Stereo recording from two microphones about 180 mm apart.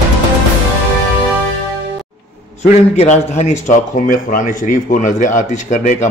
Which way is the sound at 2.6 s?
40° left (ahead or behind).